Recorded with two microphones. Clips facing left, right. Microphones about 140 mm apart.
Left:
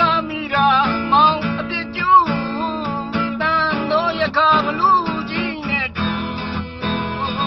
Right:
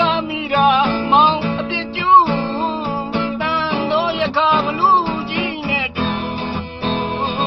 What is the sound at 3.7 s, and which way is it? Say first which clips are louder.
Music: right 1 dB; 20° right (ahead or behind).